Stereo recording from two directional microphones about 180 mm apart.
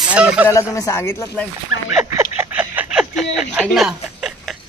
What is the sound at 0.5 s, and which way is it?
Speech, 15° left (ahead or behind).